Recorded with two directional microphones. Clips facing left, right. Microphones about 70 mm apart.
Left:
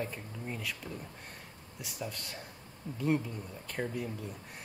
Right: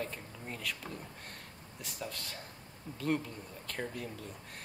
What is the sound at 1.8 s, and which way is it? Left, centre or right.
Speech, centre.